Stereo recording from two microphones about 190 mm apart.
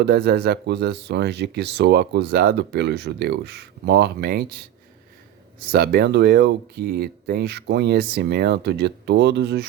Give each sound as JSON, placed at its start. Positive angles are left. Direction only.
{"t": 0.0, "sound": "speech", "side_deg": -60}